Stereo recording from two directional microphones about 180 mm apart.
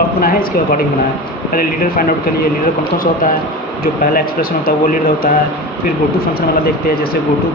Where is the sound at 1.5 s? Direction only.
50° left (ahead or behind).